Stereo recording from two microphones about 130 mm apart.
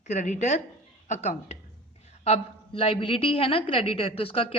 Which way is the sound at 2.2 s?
50° left (ahead or behind).